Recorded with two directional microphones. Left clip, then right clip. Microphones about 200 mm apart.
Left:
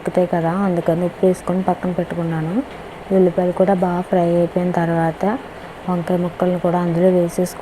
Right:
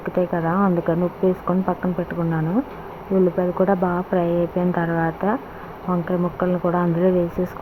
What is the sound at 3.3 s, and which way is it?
Speech, 20° left (ahead or behind).